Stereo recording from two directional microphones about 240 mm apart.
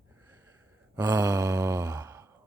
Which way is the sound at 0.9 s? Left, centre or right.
Centre.